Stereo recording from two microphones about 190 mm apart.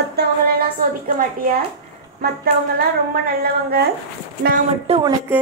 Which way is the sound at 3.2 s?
55° right (ahead or behind).